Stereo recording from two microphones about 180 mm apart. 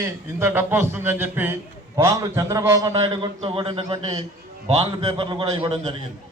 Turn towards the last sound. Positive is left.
turn(degrees=-30)  # may be behind; listen again after turning